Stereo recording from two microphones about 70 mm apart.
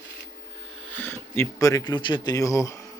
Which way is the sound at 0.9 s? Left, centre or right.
Left.